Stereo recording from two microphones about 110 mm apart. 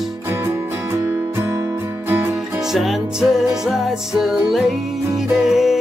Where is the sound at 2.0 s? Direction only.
20° right (ahead or behind).